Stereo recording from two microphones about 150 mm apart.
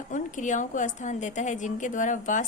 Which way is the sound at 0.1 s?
55° left (ahead or behind).